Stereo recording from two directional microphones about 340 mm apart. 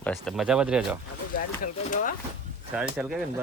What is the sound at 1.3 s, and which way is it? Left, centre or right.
Speech, left.